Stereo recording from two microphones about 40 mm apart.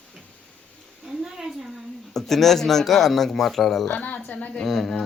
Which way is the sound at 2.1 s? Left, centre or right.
Centre.